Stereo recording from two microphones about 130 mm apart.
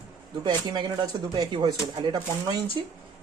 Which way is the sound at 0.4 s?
35° right (ahead or behind).